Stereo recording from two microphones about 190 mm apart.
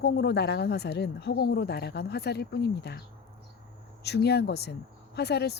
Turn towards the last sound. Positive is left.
turn(degrees=60)  # may be behind; listen again after turning